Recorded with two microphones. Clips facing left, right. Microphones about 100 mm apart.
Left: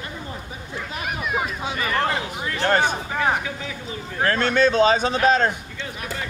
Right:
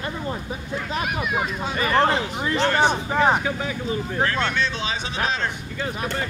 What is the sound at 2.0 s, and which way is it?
Speech, 25° right (ahead or behind).